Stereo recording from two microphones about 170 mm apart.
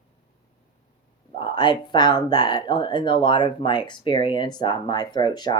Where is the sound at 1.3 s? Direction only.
25° left (ahead or behind).